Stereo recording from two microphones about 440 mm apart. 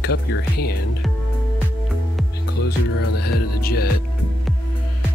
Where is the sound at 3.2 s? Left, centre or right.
Left.